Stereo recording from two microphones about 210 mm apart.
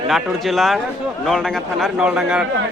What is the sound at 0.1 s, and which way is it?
A man's voice, centre (ahead or behind).